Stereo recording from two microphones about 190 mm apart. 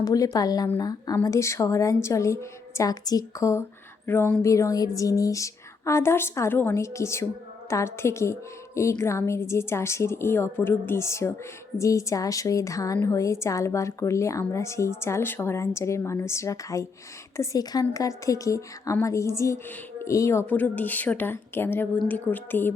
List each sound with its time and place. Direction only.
0.0 s a woman's voice: 20° left (ahead or behind)